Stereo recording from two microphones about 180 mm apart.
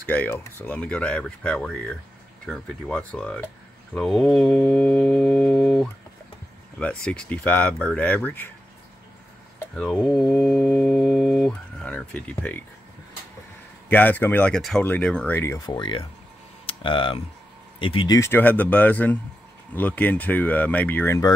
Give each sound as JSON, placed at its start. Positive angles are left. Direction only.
{"t": 0.1, "sound": "speech", "side_deg": 10}
{"t": 2.4, "sound": "mantra", "side_deg": 5}
{"t": 6.8, "sound": "speech", "side_deg": 5}
{"t": 10.0, "sound": "mantra", "side_deg": 0}
{"t": 10.4, "sound": "speech", "side_deg": 10}
{"t": 13.8, "sound": "speech", "side_deg": 10}